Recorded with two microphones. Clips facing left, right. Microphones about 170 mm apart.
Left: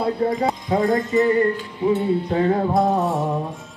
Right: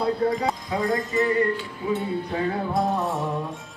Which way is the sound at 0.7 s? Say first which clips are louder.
Left 8 dB; 40° left (ahead or behind).